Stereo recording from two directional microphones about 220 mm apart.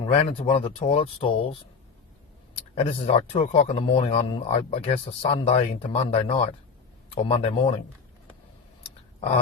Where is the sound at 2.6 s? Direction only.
25° left (ahead or behind).